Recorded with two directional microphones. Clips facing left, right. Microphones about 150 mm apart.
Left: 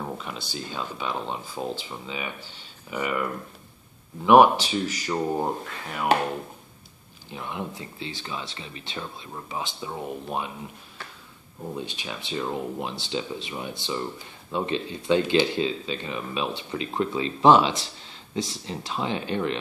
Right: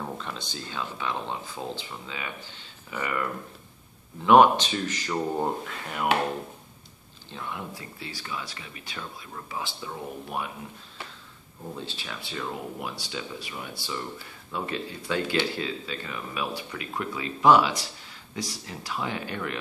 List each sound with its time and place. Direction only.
0.0 s speech: 10° left (ahead or behind)
4.3 s speech: 10° left (ahead or behind)
7.2 s speech: 20° left (ahead or behind)
11.7 s speech: 15° left (ahead or behind)